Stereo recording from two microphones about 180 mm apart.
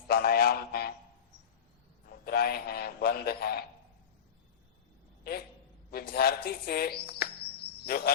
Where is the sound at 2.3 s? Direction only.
60° left (ahead or behind).